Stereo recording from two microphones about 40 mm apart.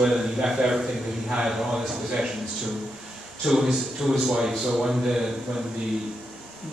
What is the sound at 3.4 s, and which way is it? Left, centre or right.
A man's voice, centre.